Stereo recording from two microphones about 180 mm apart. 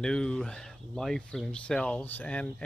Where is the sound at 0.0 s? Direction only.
5° left (ahead or behind).